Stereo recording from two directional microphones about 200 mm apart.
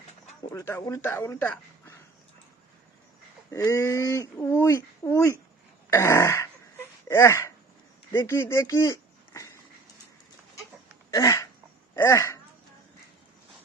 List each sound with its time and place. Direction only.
0.5 s speech: 10° left (ahead or behind)
3.5 s speech: 15° left (ahead or behind)
5.9 s a sound: 15° left (ahead or behind)
8.1 s speech: 10° left (ahead or behind)
11.1 s a sound: 15° left (ahead or behind)
11.9 s speech: 15° left (ahead or behind)